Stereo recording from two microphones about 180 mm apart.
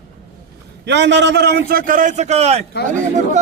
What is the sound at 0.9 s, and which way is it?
A man's voice, 75° right (ahead or behind).